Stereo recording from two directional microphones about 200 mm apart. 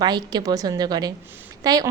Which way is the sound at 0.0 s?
20° right (ahead or behind).